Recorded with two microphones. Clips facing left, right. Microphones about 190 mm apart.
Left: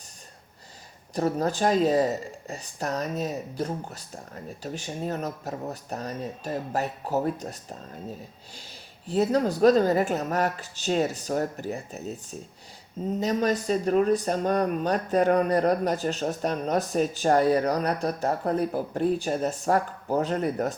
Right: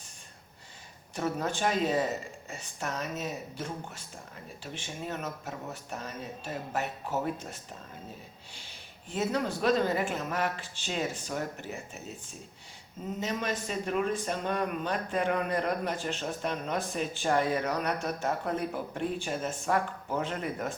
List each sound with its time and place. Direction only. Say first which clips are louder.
1.1 s speech: left 6 dB; 35° left (ahead or behind)
9.0 s speech: left 7 dB; 35° left (ahead or behind)